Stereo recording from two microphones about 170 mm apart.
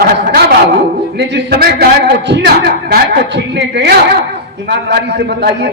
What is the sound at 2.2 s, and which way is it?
A woman's voice, 80° right.